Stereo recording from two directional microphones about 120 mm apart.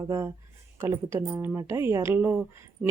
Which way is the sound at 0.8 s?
20° right (ahead or behind).